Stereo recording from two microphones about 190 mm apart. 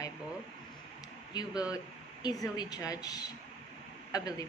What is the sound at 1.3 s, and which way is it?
Speech, 20° left (ahead or behind).